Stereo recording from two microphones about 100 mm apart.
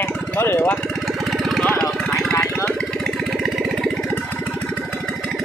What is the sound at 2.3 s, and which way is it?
Engine, 20° left (ahead or behind).